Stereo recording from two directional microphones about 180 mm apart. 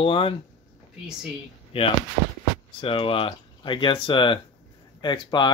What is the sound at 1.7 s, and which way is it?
Speech, 30° left (ahead or behind).